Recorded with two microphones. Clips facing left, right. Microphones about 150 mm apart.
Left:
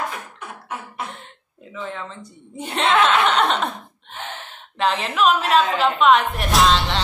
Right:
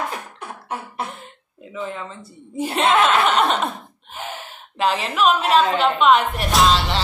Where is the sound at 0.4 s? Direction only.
30° right (ahead or behind).